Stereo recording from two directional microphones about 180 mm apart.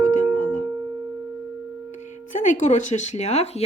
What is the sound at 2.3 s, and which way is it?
Speech, 45° left (ahead or behind).